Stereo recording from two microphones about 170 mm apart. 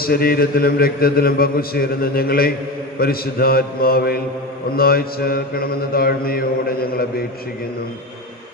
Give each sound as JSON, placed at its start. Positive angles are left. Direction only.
{"t": 0.0, "sound": "a man's voice", "side_deg": 60}